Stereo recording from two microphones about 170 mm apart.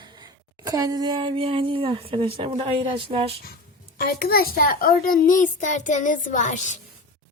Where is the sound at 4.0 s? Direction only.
65° left (ahead or behind); by 6.7 s 45° left (ahead or behind).